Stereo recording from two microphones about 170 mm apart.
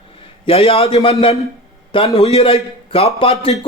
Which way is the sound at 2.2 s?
40° left (ahead or behind).